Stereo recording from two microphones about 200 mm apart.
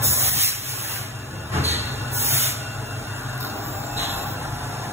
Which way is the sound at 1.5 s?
30° right (ahead or behind).